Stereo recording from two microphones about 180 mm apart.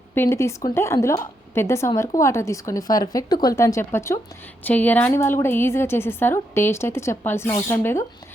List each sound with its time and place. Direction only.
0.1 s a woman's voice: 15° left (ahead or behind)